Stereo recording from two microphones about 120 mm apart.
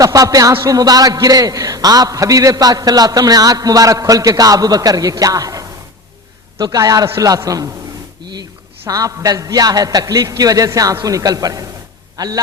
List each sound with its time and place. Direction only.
0.0 s a man's voice: 30° right (ahead or behind)
8.9 s a man's voice: 30° right (ahead or behind)